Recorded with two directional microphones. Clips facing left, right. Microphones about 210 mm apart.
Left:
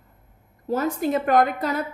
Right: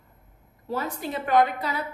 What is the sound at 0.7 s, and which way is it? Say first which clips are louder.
A woman's voice: left 7 dB; 45° left (ahead or behind).